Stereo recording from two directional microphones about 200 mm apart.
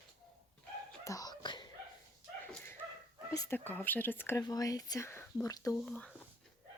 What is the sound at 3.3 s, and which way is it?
Speech, 15° left (ahead or behind).